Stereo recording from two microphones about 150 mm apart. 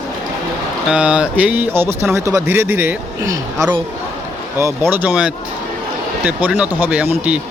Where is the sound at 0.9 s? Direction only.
5° right (ahead or behind).